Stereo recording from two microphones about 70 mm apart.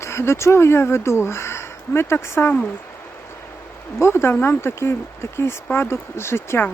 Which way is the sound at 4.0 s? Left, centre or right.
Left.